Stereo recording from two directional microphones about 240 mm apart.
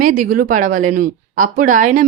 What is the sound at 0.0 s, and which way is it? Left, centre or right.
Speech, right.